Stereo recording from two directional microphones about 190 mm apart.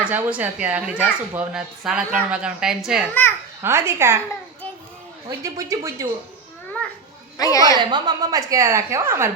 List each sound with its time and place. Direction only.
0.0 s speech: 5° right (ahead or behind)
3.6 s a woman's voice: 15° right (ahead or behind)
5.4 s a woman's voice: 15° right (ahead or behind)
7.3 s a woman's voice: 20° left (ahead or behind)
7.8 s a woman's voice: 25° right (ahead or behind)